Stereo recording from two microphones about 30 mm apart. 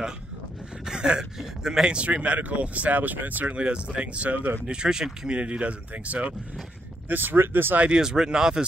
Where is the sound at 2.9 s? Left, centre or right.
Right.